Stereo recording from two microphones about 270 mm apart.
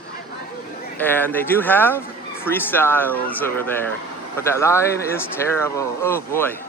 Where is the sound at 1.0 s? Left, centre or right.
Centre.